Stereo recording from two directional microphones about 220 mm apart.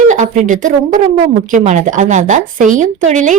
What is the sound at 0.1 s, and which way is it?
Speech, 35° right (ahead or behind).